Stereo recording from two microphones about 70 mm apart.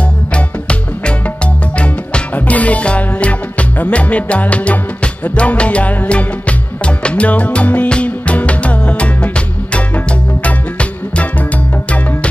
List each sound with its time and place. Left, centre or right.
0.3 s music: centre